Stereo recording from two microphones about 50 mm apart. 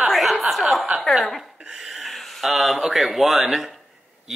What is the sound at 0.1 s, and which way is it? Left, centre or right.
Chuckle, centre.